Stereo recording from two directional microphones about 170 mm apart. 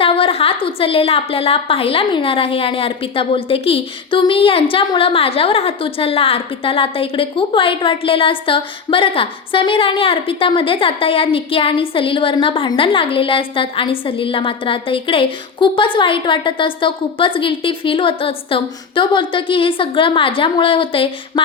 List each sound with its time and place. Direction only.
0.0 s a woman's voice: 30° left (ahead or behind)